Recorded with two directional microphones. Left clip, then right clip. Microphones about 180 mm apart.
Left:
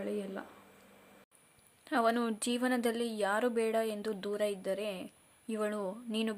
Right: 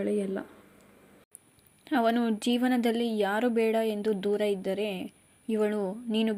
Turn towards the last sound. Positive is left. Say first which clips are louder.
# right 6 dB
turn(degrees=-5)  # may be behind; listen again after turning